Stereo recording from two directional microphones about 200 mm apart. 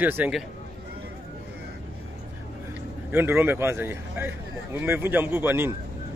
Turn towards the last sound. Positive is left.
turn(degrees=-10)  # may be behind; listen again after turning